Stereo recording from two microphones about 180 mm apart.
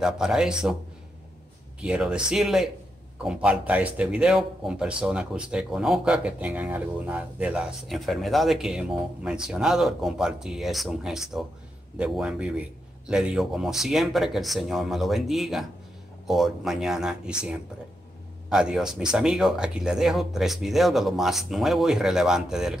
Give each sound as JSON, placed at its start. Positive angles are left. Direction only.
{"t": 0.0, "sound": "speech", "side_deg": -5}
{"t": 1.8, "sound": "speech", "side_deg": -5}